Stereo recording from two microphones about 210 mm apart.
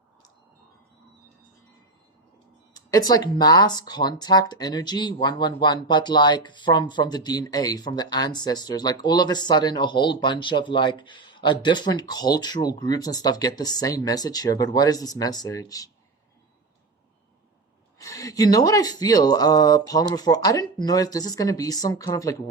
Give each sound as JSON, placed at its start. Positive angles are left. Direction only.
{"t": 2.7, "sound": "speech", "side_deg": 15}
{"t": 18.0, "sound": "speech", "side_deg": 15}